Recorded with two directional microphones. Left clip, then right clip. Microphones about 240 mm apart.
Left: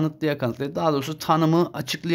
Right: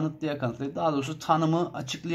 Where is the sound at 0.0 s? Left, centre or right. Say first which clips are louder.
Left 6 dB; left.